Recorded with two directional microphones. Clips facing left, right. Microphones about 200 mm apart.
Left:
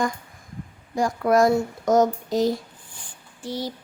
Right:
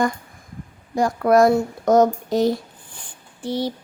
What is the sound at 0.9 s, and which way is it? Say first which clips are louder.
Speech: right 3 dB; 60° right (ahead or behind).